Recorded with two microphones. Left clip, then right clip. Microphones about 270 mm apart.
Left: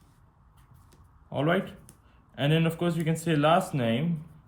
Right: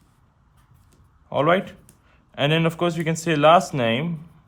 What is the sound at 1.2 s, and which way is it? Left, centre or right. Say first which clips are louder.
A man's voice: right 8 dB; right.